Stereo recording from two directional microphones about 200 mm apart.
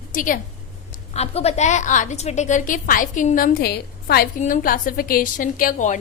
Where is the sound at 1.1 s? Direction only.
30° left (ahead or behind).